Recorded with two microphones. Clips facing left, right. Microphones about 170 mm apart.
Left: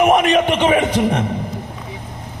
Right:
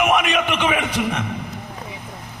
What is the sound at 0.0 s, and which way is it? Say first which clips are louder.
A man's voice: left 6 dB; 35° left (ahead or behind).